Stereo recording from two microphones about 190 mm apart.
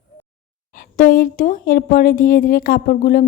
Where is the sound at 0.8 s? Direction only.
45° left (ahead or behind).